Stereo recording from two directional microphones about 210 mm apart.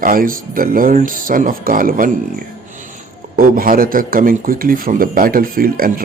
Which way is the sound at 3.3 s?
45° right (ahead or behind).